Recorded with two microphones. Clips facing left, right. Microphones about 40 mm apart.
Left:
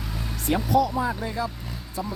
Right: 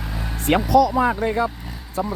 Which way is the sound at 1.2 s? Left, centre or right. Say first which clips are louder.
Right 8 dB; right.